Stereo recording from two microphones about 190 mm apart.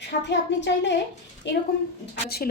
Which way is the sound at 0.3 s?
65° left (ahead or behind).